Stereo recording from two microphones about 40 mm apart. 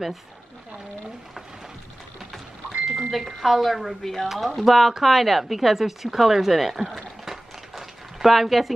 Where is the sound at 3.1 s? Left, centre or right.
Centre.